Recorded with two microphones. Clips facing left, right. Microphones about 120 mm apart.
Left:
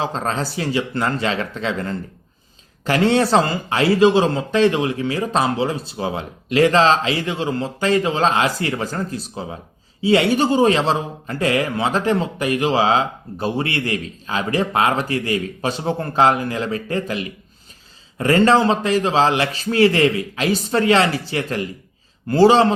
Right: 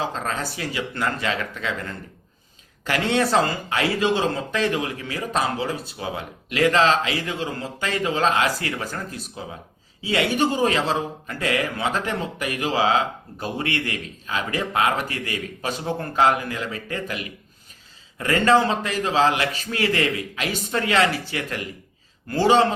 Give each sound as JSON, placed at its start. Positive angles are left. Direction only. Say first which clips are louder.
{"t": 0.0, "sound": "a man's voice", "louder": "left 4 dB", "side_deg": 30}